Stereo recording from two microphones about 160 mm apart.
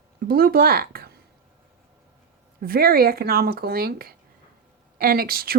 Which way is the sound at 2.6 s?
70° right (ahead or behind).